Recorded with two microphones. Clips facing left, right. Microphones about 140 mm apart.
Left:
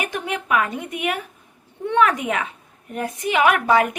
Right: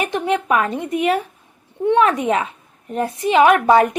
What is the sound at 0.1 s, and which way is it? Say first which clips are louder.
A woman's voice: right 5 dB; 30° right (ahead or behind).